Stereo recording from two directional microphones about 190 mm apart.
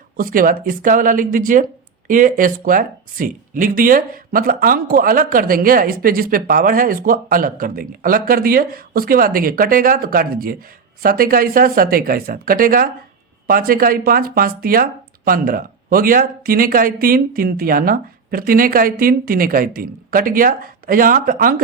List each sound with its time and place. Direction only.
0.2 s speech: 45° right (ahead or behind)